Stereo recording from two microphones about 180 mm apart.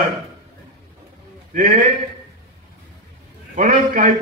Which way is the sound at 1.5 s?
45° right (ahead or behind).